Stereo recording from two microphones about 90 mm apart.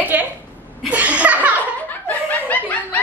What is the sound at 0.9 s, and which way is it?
Chuckle, 15° right (ahead or behind).